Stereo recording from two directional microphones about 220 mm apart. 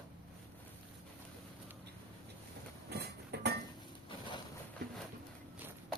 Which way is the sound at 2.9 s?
50° right (ahead or behind).